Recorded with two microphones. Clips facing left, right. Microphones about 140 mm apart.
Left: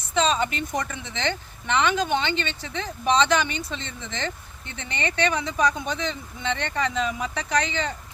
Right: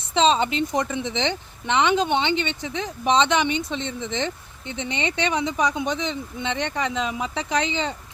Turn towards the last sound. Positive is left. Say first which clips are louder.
# right 1 dB
turn(degrees=-20)  # may be behind; listen again after turning